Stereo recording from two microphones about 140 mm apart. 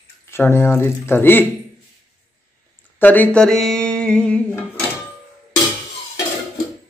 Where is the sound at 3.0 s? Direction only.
10° left (ahead or behind).